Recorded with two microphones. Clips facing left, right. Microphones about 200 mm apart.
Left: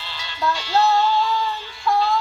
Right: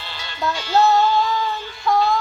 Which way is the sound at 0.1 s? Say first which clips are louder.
Left 1 dB; 50° right (ahead or behind).